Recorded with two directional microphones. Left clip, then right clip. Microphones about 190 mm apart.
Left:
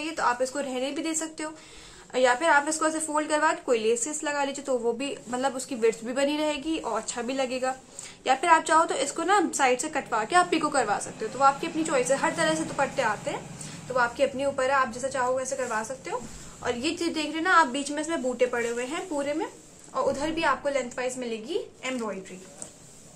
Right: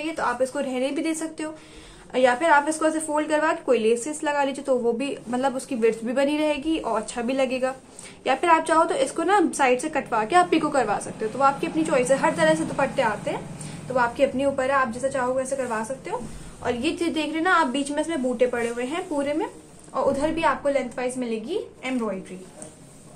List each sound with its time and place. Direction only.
0.0 s a woman's voice: 10° left (ahead or behind)